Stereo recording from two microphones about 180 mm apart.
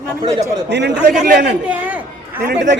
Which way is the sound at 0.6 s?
75° right (ahead or behind).